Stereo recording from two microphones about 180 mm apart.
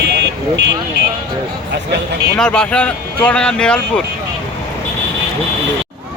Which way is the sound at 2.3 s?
5° left (ahead or behind).